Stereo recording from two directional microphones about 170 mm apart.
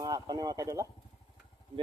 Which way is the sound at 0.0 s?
20° right (ahead or behind).